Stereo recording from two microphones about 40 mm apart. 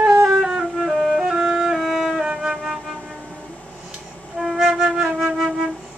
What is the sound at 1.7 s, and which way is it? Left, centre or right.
Music, centre.